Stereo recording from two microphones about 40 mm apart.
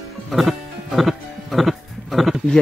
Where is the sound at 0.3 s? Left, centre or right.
Centre.